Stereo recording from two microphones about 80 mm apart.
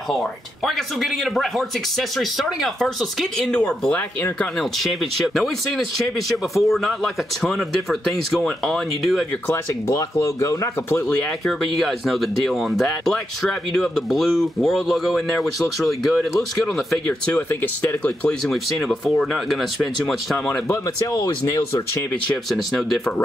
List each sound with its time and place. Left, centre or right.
0.1 s speech: centre
9.8 s speech: left
11.1 s speech: centre
11.6 s speech: centre
17.0 s speech: centre
18.5 s speech: centre
20.3 s speech: centre
20.7 s speech: left
22.5 s speech: centre